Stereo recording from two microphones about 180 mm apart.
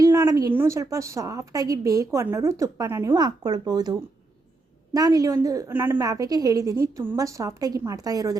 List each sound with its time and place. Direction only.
0.0 s a sound: 20° right (ahead or behind)
0.5 s a woman's voice: 15° right (ahead or behind)
4.9 s a woman's voice: 20° right (ahead or behind)